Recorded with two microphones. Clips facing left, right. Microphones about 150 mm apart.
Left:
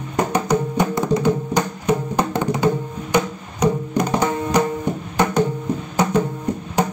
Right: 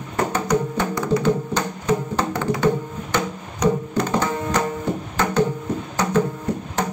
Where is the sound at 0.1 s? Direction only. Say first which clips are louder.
Left 2 dB; 15° left (ahead or behind).